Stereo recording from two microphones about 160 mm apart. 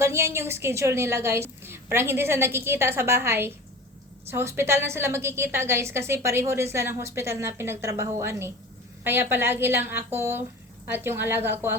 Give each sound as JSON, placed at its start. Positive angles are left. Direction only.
{"t": 0.0, "sound": "a woman's voice", "side_deg": -15}